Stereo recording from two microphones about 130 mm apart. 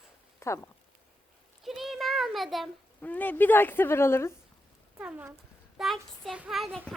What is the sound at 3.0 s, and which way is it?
Speech, 15° left (ahead or behind).